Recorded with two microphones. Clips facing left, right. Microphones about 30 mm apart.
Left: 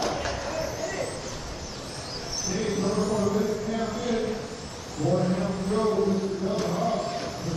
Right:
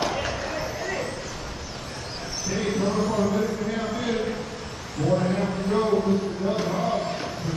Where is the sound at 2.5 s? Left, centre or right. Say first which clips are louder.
Right 2 dB; centre.